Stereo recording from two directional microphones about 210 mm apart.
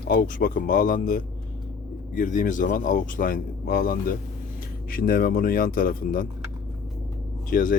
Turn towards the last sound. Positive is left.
turn(degrees=40)  # may be behind; listen again after turning